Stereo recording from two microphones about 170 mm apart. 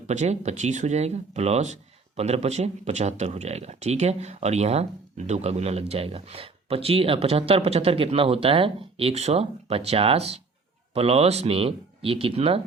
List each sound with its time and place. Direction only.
0.1 s speech: 40° right (ahead or behind)